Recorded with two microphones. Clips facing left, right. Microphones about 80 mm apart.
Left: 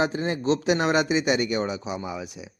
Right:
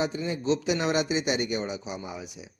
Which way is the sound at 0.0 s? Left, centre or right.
Left.